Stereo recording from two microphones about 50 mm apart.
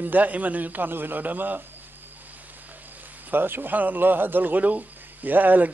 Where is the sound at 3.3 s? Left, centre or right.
Right.